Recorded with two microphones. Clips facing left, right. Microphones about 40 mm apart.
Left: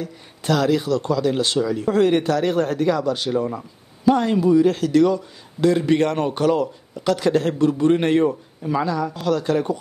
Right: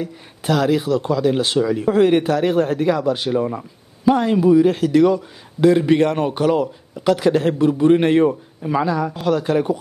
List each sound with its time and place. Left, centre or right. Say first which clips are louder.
0.0 s speech: right 3 dB; centre